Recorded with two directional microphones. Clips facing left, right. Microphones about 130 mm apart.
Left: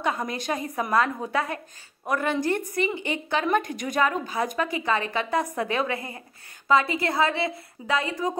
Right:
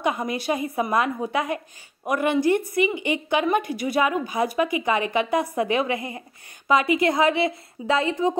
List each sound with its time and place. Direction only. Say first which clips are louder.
0.0 s a woman's voice: right 3 dB; 15° right (ahead or behind)